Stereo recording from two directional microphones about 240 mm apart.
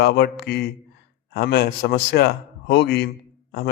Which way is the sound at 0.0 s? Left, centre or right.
Left.